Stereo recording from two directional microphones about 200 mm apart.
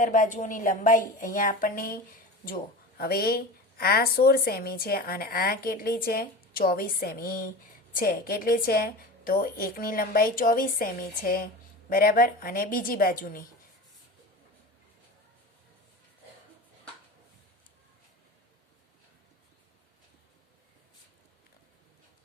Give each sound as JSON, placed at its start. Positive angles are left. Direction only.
{"t": 0.0, "sound": "a woman's voice", "side_deg": 40}